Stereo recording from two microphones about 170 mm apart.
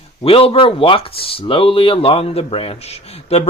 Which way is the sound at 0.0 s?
35° left (ahead or behind).